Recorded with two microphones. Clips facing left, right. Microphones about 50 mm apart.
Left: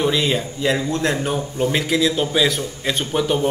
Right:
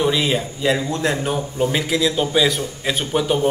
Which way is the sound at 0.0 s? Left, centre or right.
Centre.